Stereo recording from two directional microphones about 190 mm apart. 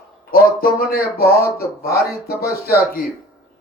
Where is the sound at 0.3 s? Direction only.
50° left (ahead or behind).